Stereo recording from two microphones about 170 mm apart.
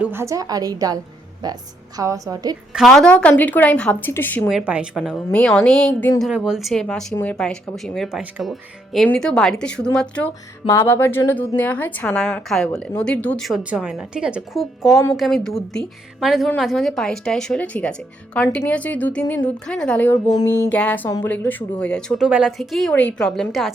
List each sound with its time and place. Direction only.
0.0 s a woman's voice: 15° right (ahead or behind)
2.7 s a woman's voice: centre (ahead or behind)
4.4 s a woman's voice: 5° right (ahead or behind)
5.1 s a woman's voice: 5° left (ahead or behind)
6.2 s a woman's voice: 5° right (ahead or behind)
10.7 s a woman's voice: 15° left (ahead or behind); by 23.7 s centre (ahead or behind)